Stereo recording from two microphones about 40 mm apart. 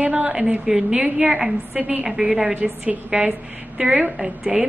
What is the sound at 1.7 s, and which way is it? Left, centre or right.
Speech, right.